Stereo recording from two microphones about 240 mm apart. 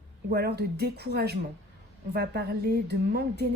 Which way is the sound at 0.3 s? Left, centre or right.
Right.